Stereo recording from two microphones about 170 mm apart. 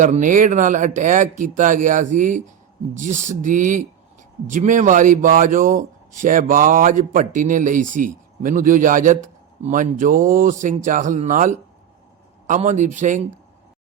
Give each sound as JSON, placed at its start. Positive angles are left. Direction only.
{"t": 0.0, "sound": "speech", "side_deg": -50}